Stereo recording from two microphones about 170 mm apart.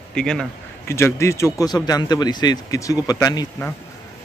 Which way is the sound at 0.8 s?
15° left (ahead or behind).